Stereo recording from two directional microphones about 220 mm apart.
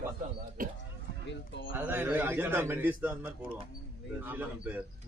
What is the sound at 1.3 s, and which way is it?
Speech, 55° left (ahead or behind).